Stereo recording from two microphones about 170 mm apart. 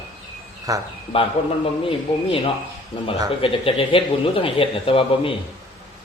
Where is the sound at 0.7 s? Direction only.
20° right (ahead or behind).